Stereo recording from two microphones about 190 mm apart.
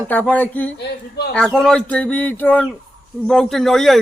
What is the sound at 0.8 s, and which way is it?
Speech, 60° left (ahead or behind).